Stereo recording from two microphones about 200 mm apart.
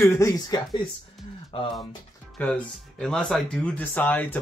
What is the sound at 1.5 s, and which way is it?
Speech, 30° left (ahead or behind).